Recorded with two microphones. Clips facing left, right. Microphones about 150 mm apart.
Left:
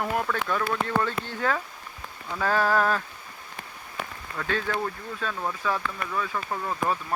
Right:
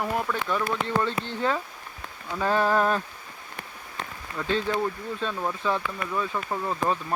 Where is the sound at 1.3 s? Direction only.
20° right (ahead or behind).